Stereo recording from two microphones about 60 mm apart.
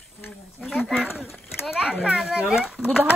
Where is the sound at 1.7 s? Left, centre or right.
Centre.